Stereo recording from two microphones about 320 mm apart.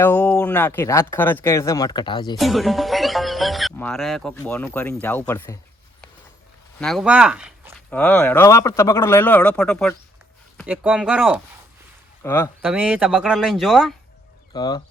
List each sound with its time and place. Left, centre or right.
0.0 s speech: centre
2.4 s speech: centre
6.7 s speech: centre
12.2 s speech: centre
12.6 s speech: centre
14.5 s speech: centre